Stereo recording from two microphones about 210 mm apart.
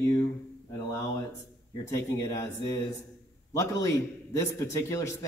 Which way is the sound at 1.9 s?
15° left (ahead or behind).